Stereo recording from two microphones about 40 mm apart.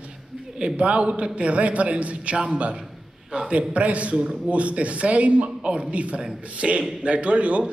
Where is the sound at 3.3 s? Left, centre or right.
Right.